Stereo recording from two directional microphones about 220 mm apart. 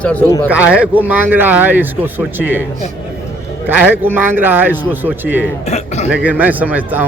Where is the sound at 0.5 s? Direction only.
5° right (ahead or behind).